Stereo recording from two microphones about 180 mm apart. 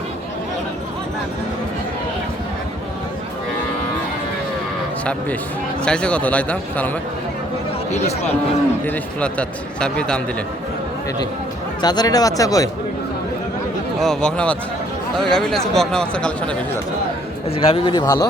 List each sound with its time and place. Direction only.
5.8 s speech: 5° left (ahead or behind)
7.9 s speech: 40° left (ahead or behind)
8.9 s speech: 5° left (ahead or behind)
11.8 s speech: 20° left (ahead or behind)
14.0 s speech: 5° left (ahead or behind)
17.5 s speech: 30° left (ahead or behind)